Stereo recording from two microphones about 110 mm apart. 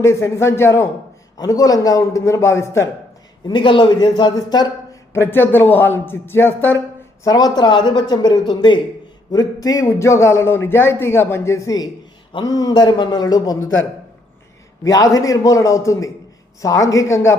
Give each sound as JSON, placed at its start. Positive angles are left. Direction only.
{"t": 0.0, "sound": "a man's voice", "side_deg": 25}
{"t": 3.4, "sound": "speech", "side_deg": 45}
{"t": 5.1, "sound": "a man's voice", "side_deg": 20}
{"t": 7.3, "sound": "a man's voice", "side_deg": 35}
{"t": 14.8, "sound": "a man's voice", "side_deg": 35}